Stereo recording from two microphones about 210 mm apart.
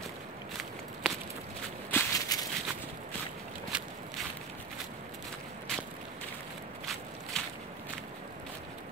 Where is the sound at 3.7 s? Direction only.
5° right (ahead or behind).